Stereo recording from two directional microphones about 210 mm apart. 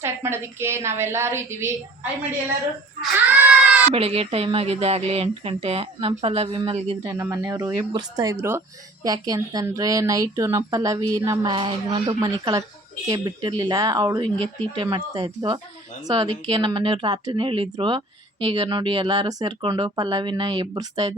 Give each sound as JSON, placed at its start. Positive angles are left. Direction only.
{"t": 0.0, "sound": "speech", "side_deg": -10}
{"t": 3.0, "sound": "a sound", "side_deg": -5}
{"t": 3.9, "sound": "speech", "side_deg": -30}
{"t": 7.0, "sound": "speech", "side_deg": -15}